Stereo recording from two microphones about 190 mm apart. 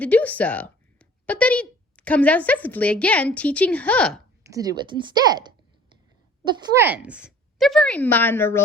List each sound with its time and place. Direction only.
0.0 s a woman's voice: 10° left (ahead or behind)
4.4 s a woman's voice: 20° right (ahead or behind)
6.8 s a woman's voice: 5° right (ahead or behind); by 8.6 s 10° left (ahead or behind)